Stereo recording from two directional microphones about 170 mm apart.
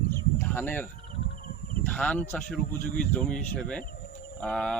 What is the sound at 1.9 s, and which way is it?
Speech, 10° left (ahead or behind).